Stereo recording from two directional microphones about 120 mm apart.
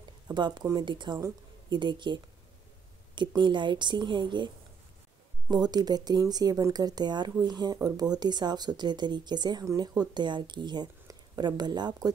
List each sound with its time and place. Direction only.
0.3 s speech: 40° right (ahead or behind)
5.5 s speech: 35° right (ahead or behind)